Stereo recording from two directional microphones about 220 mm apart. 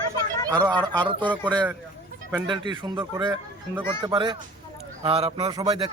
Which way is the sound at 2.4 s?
20° right (ahead or behind).